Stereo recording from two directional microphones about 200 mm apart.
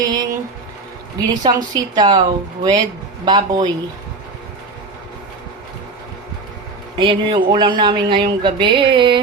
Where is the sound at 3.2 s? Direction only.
20° right (ahead or behind).